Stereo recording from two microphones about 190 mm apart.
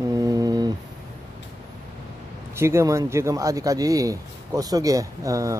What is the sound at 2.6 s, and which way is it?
Speech, 15° right (ahead or behind).